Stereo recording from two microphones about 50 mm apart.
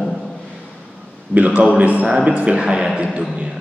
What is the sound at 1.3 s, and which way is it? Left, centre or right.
A man's voice, right.